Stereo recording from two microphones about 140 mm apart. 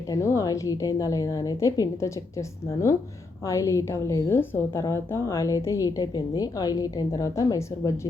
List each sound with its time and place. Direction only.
0.1 s a woman's voice: 20° left (ahead or behind)
3.4 s a woman's voice: 20° left (ahead or behind)